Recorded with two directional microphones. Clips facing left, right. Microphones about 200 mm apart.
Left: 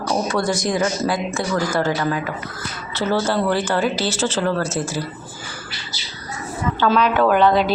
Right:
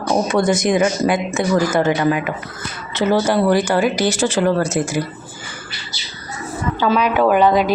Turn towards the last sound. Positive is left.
turn(degrees=-10)  # may be behind; listen again after turning